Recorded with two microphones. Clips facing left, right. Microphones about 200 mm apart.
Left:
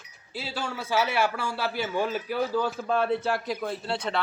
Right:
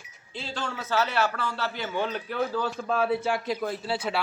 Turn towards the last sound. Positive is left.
turn(degrees=-5)  # may be behind; listen again after turning